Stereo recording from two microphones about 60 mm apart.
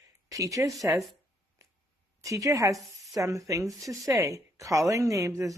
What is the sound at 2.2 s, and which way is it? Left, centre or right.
Speech, right.